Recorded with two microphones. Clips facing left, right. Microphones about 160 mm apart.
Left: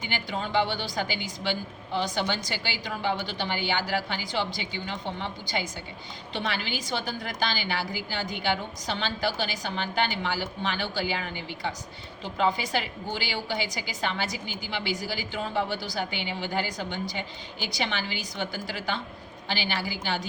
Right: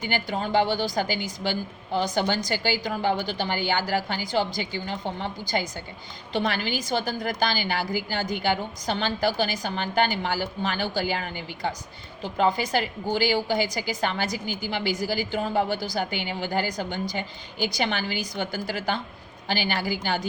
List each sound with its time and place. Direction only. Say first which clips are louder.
0.0 s a woman's voice: right 4 dB; 45° right (ahead or behind)